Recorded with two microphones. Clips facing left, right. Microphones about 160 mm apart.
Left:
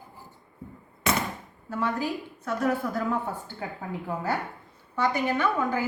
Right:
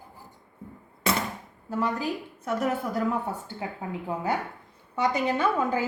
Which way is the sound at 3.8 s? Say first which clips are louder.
Right 1 dB; 20° right (ahead or behind).